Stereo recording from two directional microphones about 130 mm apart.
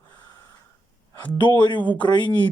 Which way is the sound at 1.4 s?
35° left (ahead or behind).